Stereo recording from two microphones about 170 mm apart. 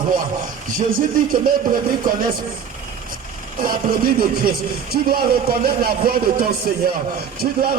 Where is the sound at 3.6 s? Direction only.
60° right (ahead or behind).